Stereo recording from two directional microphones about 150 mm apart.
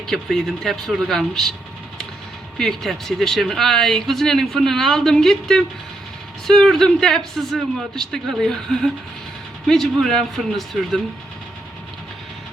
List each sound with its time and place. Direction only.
0.1 s speech: centre (ahead or behind)
2.6 s speech: centre (ahead or behind)